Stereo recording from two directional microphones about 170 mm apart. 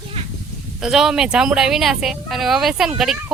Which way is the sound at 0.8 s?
5° right (ahead or behind).